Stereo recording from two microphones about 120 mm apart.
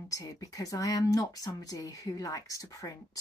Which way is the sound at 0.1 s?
30° left (ahead or behind).